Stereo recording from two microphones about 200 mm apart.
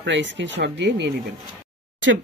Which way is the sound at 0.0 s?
65° right (ahead or behind).